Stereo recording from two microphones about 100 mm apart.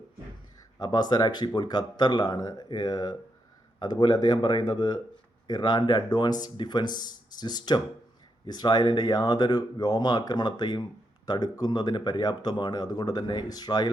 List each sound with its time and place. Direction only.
0.8 s speech: 45° left (ahead or behind)